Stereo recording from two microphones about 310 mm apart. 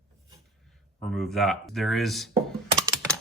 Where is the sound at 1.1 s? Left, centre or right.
Centre.